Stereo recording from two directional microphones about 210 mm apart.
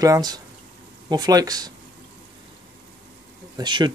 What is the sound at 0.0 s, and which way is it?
Speech, 20° right (ahead or behind).